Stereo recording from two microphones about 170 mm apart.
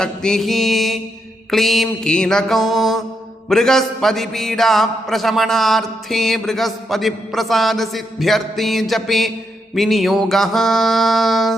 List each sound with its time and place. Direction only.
0.0 s a man's voice: 5° left (ahead or behind)